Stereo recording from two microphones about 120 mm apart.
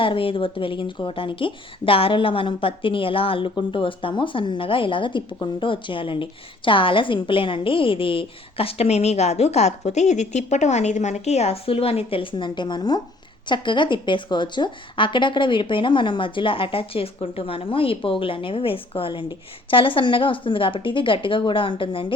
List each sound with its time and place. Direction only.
0.0 s a woman's voice: 45° left (ahead or behind)